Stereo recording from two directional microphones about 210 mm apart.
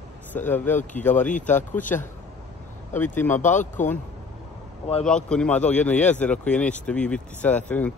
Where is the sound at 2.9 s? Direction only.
10° left (ahead or behind).